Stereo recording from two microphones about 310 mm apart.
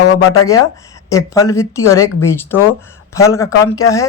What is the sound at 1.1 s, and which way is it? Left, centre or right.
Speech, centre.